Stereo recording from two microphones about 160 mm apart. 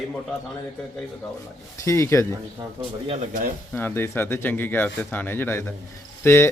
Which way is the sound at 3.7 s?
15° left (ahead or behind).